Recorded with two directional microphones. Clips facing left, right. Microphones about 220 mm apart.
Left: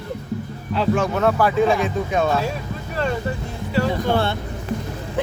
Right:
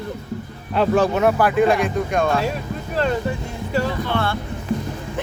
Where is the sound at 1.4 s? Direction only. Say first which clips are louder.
Right 1 dB; centre (ahead or behind).